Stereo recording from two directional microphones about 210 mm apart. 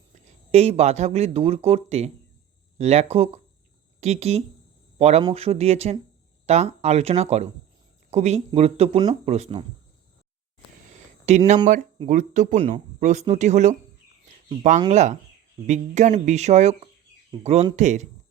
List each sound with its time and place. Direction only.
0.1 s speech: 30° right (ahead or behind)
11.3 s speech: 35° right (ahead or behind)
14.8 s speech: 35° right (ahead or behind)